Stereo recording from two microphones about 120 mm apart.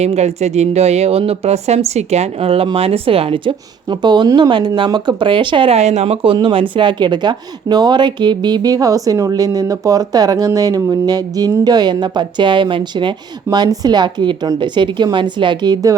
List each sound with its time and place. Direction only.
0.0 s speech: 65° right (ahead or behind); by 5.7 s 40° right (ahead or behind)
5.7 s speech: 65° right (ahead or behind); by 16.0 s 35° right (ahead or behind)